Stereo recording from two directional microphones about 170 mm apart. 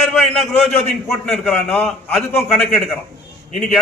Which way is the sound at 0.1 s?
5° left (ahead or behind).